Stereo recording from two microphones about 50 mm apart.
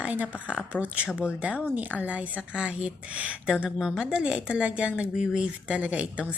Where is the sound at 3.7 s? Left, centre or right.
Centre.